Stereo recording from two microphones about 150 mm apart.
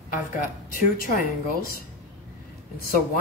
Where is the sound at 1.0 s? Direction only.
70° left (ahead or behind).